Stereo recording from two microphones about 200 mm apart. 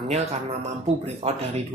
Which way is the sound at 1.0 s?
30° right (ahead or behind).